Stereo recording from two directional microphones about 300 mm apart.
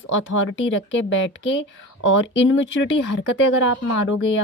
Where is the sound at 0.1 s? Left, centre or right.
Left.